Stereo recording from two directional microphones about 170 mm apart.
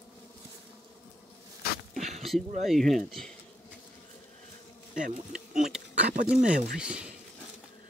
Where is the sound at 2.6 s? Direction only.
Centre (ahead or behind).